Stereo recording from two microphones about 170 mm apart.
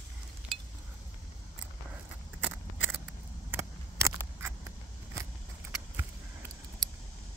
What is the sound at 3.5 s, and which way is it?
Scissors, 15° right (ahead or behind).